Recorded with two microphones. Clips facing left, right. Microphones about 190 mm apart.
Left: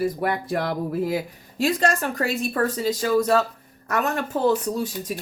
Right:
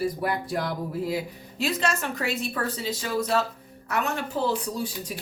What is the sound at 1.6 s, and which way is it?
A woman's voice, 40° left (ahead or behind).